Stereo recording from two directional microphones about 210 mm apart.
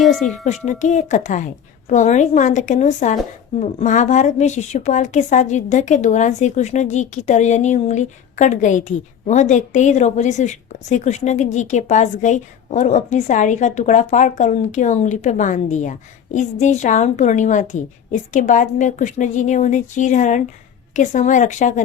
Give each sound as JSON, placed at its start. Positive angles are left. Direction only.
{"t": 0.0, "sound": "speech", "side_deg": 0}
{"t": 0.4, "sound": "speech", "side_deg": 35}